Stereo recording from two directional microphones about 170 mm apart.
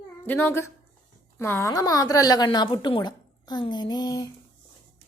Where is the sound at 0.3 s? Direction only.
15° left (ahead or behind).